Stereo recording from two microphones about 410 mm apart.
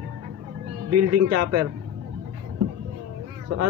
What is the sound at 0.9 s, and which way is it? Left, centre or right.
Speech, right.